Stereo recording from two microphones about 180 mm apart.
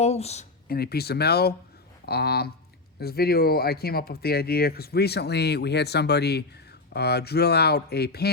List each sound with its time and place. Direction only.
0.0 s speech: 35° left (ahead or behind)
0.7 s speech: 60° left (ahead or behind)